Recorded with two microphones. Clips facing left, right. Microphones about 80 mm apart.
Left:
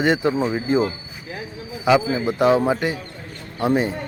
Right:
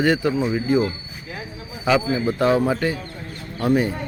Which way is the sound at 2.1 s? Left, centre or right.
Centre.